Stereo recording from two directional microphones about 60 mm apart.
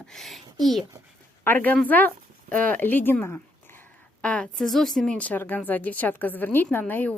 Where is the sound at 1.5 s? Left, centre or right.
Left.